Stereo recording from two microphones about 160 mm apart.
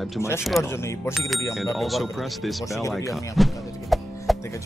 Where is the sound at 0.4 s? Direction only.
Centre (ahead or behind).